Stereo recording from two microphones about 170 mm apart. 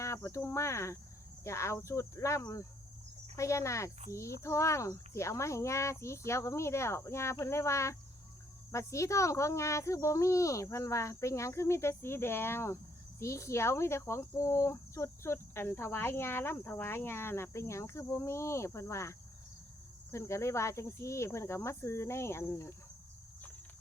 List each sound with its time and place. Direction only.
0.0 s cricket: 15° left (ahead or behind)
1.5 s speech: 15° left (ahead or behind)